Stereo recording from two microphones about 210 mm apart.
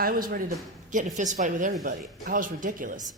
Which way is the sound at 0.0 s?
45° right (ahead or behind).